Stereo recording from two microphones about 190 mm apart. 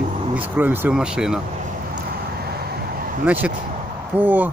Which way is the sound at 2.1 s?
55° right (ahead or behind).